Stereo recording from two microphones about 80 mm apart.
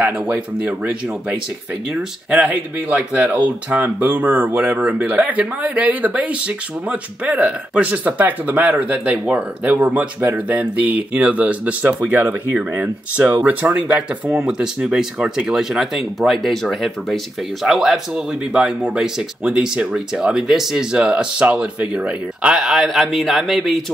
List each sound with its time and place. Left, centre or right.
0.0 s speech: centre
14.4 s speech: centre